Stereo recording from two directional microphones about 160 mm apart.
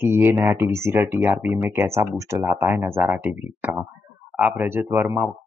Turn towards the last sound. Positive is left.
turn(degrees=-15)  # may be behind; listen again after turning